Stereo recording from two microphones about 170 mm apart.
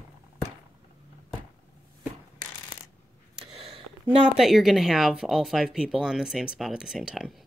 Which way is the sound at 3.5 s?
35° right (ahead or behind).